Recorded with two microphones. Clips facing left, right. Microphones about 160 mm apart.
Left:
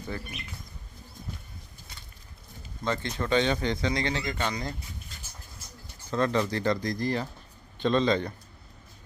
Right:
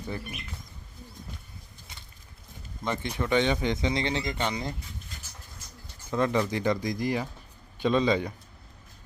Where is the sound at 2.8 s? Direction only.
15° right (ahead or behind).